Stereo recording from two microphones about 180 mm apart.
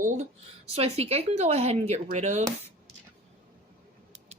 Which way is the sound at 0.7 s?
35° right (ahead or behind).